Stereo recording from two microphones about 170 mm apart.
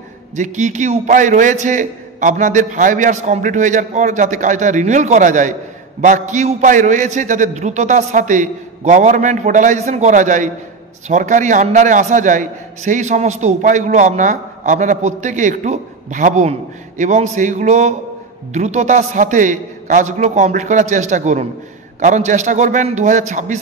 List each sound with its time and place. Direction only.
0.4 s a man's voice: 45° right (ahead or behind)